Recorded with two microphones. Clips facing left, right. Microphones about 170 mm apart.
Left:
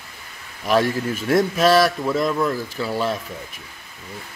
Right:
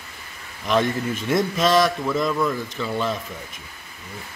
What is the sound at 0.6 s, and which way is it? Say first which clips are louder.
A man's voice: left 2 dB; 5° left (ahead or behind).